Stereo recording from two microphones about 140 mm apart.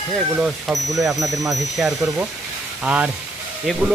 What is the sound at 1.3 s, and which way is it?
Speech, 25° right (ahead or behind).